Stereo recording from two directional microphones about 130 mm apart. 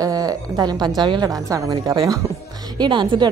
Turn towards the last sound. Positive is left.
turn(degrees=-35)  # may be behind; listen again after turning